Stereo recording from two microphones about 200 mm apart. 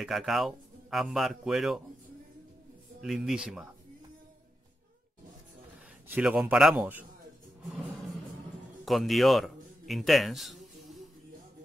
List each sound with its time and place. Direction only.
0.0 s speech: centre (ahead or behind)
3.0 s speech: centre (ahead or behind)
6.0 s a man's voice: 5° right (ahead or behind)
8.8 s a sound: centre (ahead or behind)